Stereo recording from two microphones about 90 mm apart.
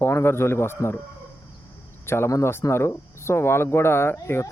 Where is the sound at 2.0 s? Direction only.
30° left (ahead or behind).